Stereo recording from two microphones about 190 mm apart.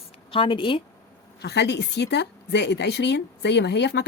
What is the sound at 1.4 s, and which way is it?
Speech, 60° left (ahead or behind).